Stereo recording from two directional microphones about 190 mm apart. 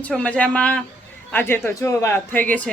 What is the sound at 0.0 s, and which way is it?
Speech, 5° left (ahead or behind).